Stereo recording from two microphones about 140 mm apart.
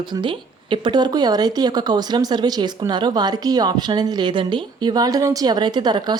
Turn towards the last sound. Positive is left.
turn(degrees=-30)  # may be behind; listen again after turning